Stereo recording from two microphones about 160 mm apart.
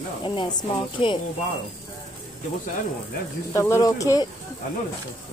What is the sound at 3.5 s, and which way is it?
Speech, 20° left (ahead or behind).